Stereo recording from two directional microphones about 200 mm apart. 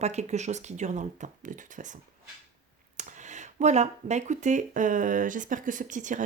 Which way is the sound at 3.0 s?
35° right (ahead or behind).